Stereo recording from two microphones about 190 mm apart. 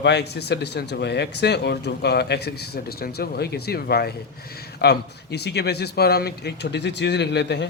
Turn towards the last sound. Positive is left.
turn(degrees=65)  # may be behind; listen again after turning